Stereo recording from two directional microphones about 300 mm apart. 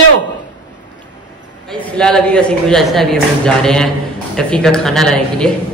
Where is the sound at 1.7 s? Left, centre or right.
Centre.